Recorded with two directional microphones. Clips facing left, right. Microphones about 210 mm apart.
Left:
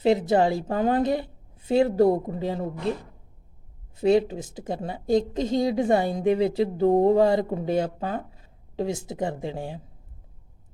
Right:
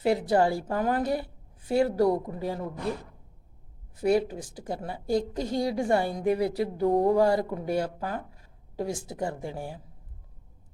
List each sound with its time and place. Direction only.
0.0 s a woman's voice: 20° left (ahead or behind)
3.9 s a woman's voice: 25° left (ahead or behind)